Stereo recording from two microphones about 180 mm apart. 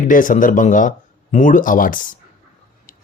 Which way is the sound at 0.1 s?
45° left (ahead or behind).